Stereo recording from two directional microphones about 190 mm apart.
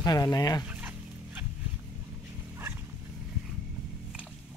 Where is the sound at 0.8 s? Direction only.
10° right (ahead or behind).